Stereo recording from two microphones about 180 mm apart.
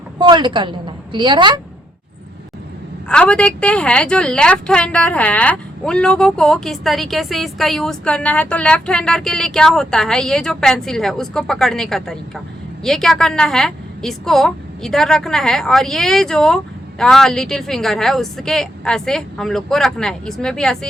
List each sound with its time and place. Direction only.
0.2 s a woman's voice: 25° right (ahead or behind)
3.1 s a woman's voice: 5° left (ahead or behind)